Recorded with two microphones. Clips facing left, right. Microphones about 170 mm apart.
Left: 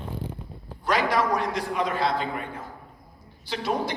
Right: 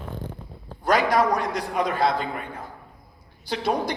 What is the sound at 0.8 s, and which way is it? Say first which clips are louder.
A woman's voice: right 3 dB; 40° right (ahead or behind).